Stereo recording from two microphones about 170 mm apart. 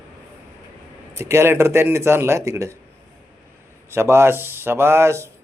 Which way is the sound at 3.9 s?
15° right (ahead or behind).